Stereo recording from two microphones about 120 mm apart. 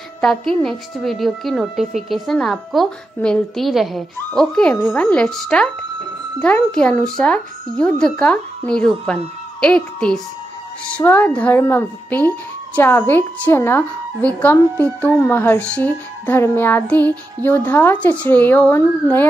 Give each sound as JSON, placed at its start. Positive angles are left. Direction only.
{"t": 0.2, "sound": "a woman's voice", "side_deg": 5}